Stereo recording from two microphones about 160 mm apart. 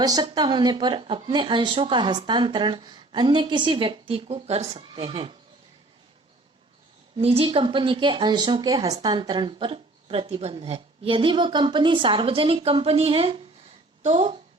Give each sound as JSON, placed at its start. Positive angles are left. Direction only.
{"t": 0.0, "sound": "a woman's voice", "side_deg": -25}
{"t": 7.2, "sound": "a woman's voice", "side_deg": -35}